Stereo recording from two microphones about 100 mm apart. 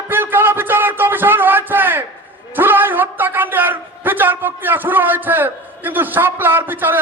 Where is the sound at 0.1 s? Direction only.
20° right (ahead or behind).